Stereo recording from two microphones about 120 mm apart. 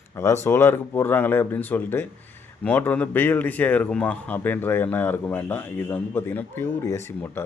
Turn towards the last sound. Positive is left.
turn(degrees=20)  # may be behind; listen again after turning